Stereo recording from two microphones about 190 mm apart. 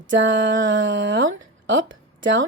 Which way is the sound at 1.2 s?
80° right.